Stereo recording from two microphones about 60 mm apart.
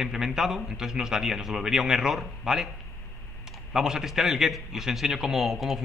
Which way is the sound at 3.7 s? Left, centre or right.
Centre.